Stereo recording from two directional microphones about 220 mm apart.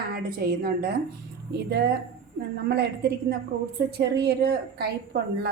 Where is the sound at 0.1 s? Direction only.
45° right (ahead or behind).